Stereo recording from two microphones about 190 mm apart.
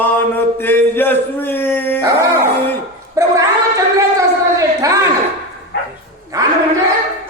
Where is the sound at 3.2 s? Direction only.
15° right (ahead or behind).